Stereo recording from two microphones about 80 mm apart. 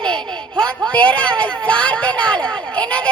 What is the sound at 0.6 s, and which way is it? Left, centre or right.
Speech, centre.